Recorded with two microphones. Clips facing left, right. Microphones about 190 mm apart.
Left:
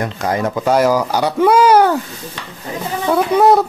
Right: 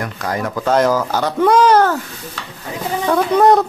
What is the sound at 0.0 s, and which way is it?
Speech, 25° left (ahead or behind).